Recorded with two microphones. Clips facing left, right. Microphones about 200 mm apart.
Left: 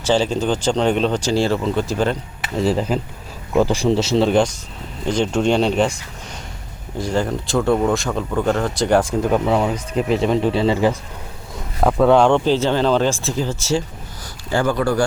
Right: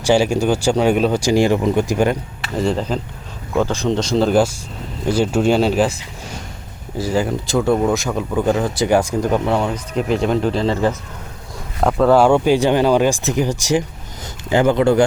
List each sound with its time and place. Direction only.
0.0 s speech: 10° right (ahead or behind)
2.6 s speech: 5° left (ahead or behind)
7.0 s speech: 5° right (ahead or behind); by 15.0 s 20° right (ahead or behind)